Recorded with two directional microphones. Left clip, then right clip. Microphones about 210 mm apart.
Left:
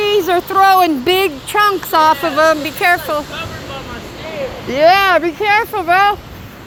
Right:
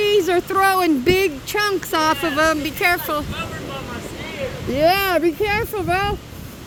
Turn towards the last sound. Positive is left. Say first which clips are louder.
# left 9 dB
turn(degrees=-40)  # may be behind; listen again after turning